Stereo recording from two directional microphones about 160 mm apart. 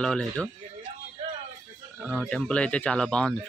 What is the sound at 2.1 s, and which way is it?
Speech, 5° left (ahead or behind).